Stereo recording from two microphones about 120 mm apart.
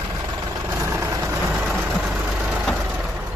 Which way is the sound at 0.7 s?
20° right (ahead or behind).